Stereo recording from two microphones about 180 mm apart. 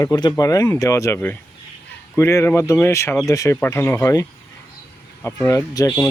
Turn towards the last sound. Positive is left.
turn(degrees=20)  # may be behind; listen again after turning